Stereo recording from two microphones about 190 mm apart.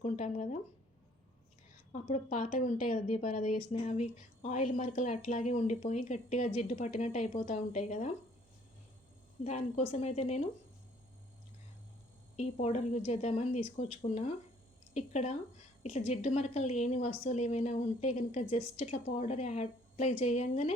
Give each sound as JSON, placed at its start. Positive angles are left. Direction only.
{"t": 0.0, "sound": "speech", "side_deg": 40}
{"t": 1.9, "sound": "speech", "side_deg": 40}
{"t": 9.4, "sound": "speech", "side_deg": 35}
{"t": 12.4, "sound": "speech", "side_deg": 35}